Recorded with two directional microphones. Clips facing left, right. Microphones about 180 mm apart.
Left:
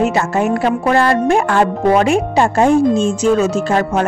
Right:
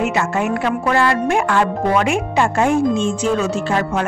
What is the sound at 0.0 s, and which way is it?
Speech, 35° left (ahead or behind).